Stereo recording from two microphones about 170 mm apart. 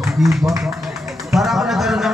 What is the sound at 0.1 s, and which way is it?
A man's voice, centre (ahead or behind).